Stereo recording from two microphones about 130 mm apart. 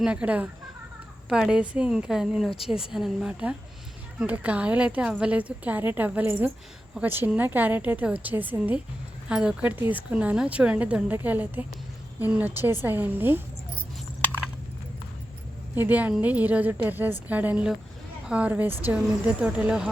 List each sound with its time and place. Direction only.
0.0 s a woman's voice: 10° right (ahead or behind)
15.7 s a woman's voice: 15° right (ahead or behind)